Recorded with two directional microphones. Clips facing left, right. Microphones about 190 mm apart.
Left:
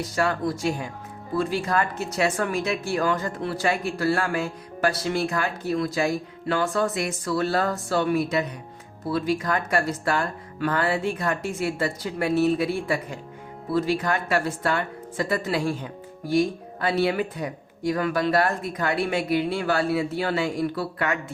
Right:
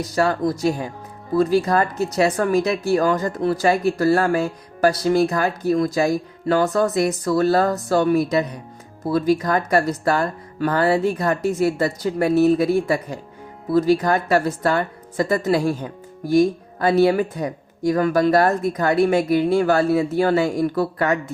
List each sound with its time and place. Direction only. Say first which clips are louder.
0.2 s a woman's voice: right 5 dB; 40° right (ahead or behind)